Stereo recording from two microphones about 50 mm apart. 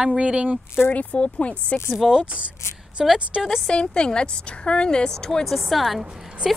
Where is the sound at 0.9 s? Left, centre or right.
Left.